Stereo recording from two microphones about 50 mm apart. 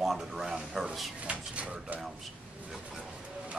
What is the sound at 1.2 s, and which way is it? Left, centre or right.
Speech, right.